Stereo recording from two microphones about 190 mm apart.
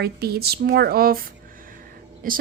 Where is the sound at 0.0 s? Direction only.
55° right (ahead or behind).